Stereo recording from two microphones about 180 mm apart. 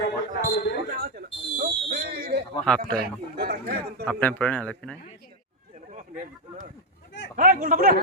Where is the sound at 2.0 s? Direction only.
60° right (ahead or behind).